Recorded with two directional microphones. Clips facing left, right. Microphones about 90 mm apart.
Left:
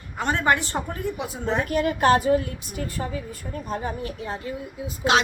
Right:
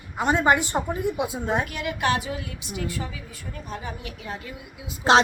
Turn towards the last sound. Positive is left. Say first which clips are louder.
# left 7 dB
turn(degrees=35)  # may be behind; listen again after turning